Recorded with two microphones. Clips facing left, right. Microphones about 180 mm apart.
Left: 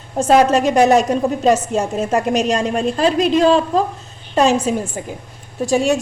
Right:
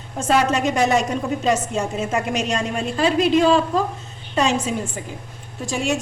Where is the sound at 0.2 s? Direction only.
40° left (ahead or behind).